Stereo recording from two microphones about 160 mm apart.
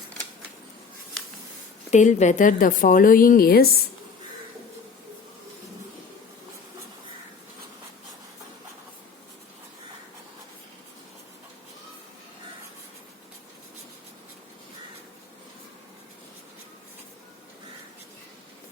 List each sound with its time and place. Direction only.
1.9 s speech: 50° left (ahead or behind); by 3.8 s 70° left (ahead or behind)